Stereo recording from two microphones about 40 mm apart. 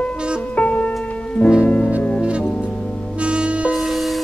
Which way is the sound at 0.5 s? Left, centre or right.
Left.